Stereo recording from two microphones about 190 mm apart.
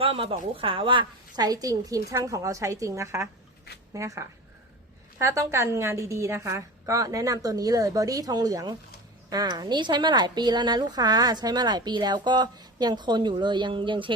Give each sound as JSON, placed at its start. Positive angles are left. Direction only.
{"t": 0.0, "sound": "a woman's voice", "side_deg": -30}